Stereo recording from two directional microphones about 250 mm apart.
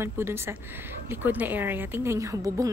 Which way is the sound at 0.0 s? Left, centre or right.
Centre.